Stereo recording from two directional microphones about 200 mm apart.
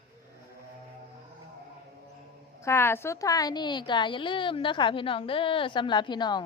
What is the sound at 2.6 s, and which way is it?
A woman's voice, 15° left (ahead or behind).